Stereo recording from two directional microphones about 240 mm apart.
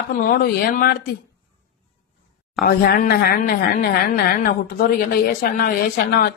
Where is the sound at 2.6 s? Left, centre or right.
Left.